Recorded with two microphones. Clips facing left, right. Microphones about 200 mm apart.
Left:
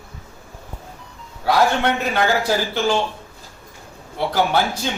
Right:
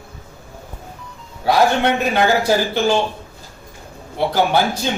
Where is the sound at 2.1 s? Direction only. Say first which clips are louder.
Right 3 dB; 20° right (ahead or behind).